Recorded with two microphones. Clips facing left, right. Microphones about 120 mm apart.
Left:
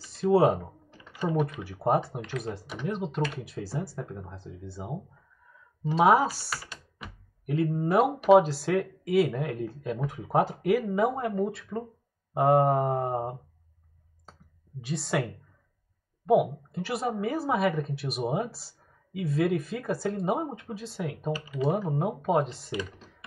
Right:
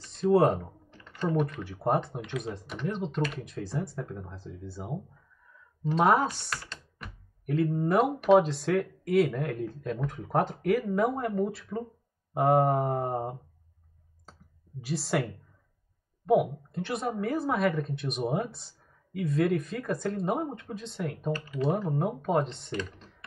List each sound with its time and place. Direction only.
0.0 s a woman's voice: 5° left (ahead or behind)
5.9 s computer keyboard: 5° left (ahead or behind)
7.7 s a woman's voice: 5° left (ahead or behind)
14.8 s a woman's voice: centre (ahead or behind)